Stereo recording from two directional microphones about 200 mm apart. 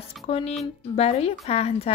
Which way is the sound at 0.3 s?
30° left (ahead or behind).